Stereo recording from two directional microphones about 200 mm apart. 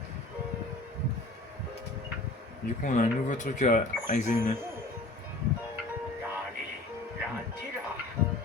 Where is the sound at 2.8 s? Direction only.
40° left (ahead or behind).